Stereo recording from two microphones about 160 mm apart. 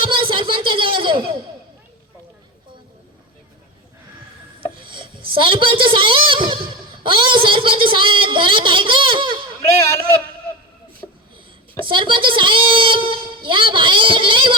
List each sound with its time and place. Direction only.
0.0 s a sound: 30° right (ahead or behind)
4.7 s chopping: 30° right (ahead or behind)
5.3 s a man's voice: 30° right (ahead or behind)
9.6 s speech: 20° left (ahead or behind)
11.9 s a man's voice: 30° right (ahead or behind)